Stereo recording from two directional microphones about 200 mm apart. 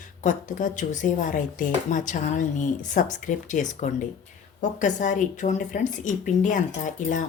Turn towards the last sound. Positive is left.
turn(degrees=40)  # may be behind; listen again after turning